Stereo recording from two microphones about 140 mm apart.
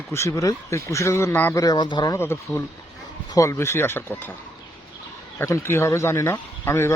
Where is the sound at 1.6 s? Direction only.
30° left (ahead or behind).